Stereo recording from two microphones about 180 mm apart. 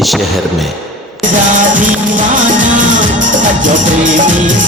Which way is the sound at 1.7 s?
45° right (ahead or behind).